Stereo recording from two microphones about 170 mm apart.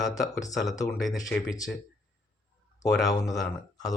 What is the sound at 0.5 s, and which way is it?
Speech, centre (ahead or behind).